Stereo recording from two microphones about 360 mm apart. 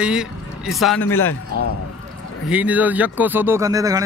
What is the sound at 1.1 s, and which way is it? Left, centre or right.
Speech, left.